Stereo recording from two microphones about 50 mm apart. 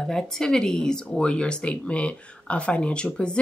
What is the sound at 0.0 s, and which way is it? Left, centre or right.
Speech, centre.